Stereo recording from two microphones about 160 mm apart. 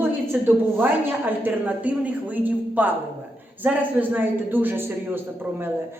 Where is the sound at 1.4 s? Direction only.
10° right (ahead or behind).